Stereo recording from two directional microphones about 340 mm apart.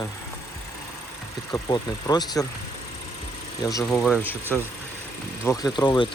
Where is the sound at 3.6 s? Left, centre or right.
Centre.